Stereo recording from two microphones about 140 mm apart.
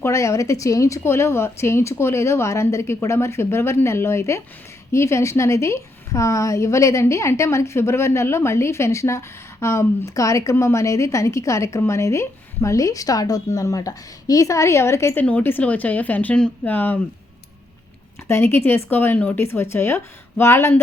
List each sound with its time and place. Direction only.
0.0 s a woman's voice: 20° left (ahead or behind)
18.3 s a woman's voice: 15° left (ahead or behind)